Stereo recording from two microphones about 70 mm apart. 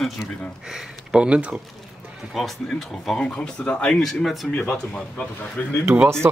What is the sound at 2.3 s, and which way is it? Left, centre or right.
Speech, centre.